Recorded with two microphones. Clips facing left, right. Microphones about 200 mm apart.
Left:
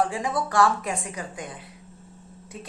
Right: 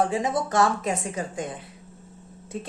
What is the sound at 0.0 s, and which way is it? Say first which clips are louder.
A woman's voice: right 2 dB; 20° right (ahead or behind).